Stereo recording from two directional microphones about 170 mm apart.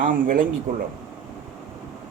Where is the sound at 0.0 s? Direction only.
55° right (ahead or behind).